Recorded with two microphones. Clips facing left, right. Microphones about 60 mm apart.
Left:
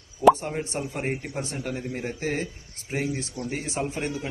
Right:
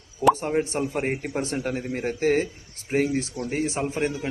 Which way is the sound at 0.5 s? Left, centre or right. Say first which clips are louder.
Right 6 dB; right.